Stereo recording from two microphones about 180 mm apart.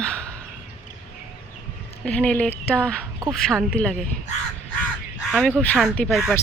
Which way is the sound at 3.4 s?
Centre (ahead or behind).